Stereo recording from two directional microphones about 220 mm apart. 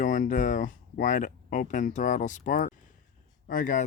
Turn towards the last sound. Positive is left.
turn(degrees=35)  # may be behind; listen again after turning